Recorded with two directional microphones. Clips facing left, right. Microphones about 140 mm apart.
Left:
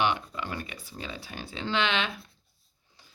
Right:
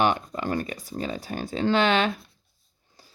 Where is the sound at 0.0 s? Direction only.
45° right (ahead or behind).